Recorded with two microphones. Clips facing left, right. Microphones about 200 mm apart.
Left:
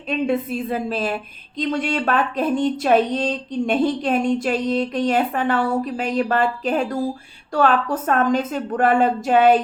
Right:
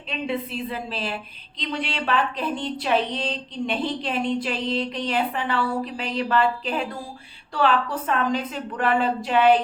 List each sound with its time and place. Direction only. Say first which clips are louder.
0.1 s a woman's voice: left 7 dB; 45° left (ahead or behind)